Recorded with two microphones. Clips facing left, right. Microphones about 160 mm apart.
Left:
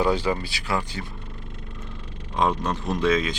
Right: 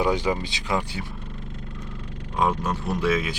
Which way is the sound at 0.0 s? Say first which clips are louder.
Even; 15° right (ahead or behind).